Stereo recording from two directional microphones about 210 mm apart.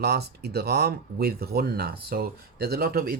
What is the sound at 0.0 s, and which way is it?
Speech, 50° right (ahead or behind).